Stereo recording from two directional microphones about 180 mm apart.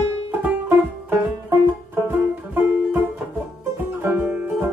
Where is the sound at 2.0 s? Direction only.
10° right (ahead or behind).